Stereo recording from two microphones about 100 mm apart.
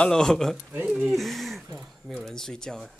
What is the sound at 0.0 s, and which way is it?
Speech, 5° left (ahead or behind).